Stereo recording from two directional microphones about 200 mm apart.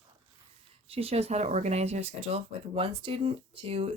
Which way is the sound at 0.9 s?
30° right (ahead or behind).